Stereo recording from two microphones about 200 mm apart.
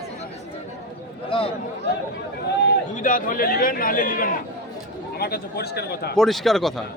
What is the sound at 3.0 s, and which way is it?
A man's voice, 45° left (ahead or behind).